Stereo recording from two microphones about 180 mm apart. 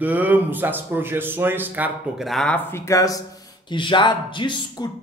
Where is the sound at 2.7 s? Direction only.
15° left (ahead or behind).